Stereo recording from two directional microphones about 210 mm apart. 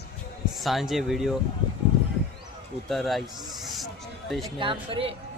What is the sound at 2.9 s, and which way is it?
Speech, centre (ahead or behind).